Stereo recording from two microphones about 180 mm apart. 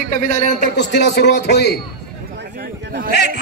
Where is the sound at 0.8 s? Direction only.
70° left (ahead or behind).